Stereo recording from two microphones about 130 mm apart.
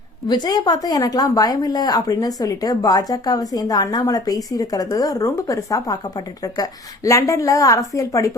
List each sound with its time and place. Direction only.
0.3 s speech: 30° left (ahead or behind)